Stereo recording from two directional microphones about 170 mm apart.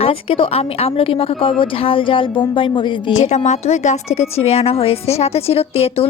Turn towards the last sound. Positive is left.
turn(degrees=35)  # may be behind; listen again after turning